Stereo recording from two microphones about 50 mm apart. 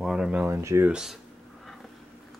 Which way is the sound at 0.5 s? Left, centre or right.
Right.